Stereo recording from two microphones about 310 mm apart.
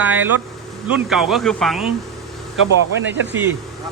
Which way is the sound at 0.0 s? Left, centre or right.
Centre.